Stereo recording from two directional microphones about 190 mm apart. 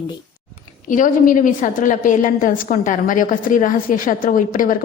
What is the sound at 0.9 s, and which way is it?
A woman's voice, 45° left (ahead or behind).